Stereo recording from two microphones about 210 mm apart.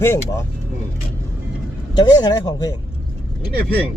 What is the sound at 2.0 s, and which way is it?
Speech, 20° left (ahead or behind).